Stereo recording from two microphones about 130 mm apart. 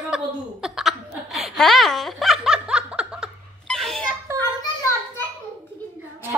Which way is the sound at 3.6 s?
Centre (ahead or behind).